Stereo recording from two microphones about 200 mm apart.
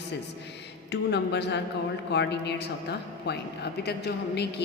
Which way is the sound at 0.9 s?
60° left (ahead or behind).